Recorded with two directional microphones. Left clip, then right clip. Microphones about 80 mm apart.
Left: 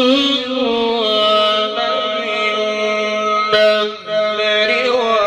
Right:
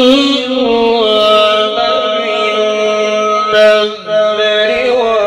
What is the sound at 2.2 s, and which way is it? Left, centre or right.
Music, left.